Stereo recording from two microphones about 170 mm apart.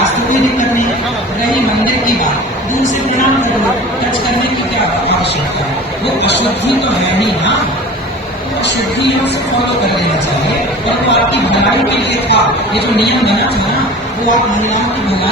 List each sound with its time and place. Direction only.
12.3 s speech: 80° left